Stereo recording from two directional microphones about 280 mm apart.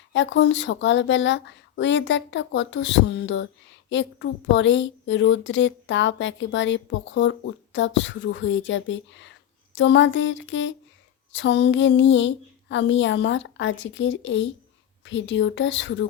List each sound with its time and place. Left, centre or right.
0.1 s a woman's voice: left